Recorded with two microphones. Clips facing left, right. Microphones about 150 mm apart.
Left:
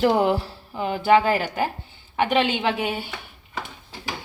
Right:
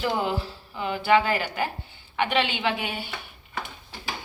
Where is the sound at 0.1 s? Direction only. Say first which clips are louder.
Left 7 dB; 65° left (ahead or behind).